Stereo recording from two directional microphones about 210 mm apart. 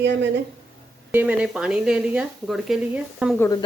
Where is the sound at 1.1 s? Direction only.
10° right (ahead or behind).